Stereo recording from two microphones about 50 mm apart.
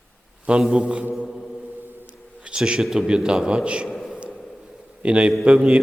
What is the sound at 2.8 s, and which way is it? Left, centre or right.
A man's voice, centre.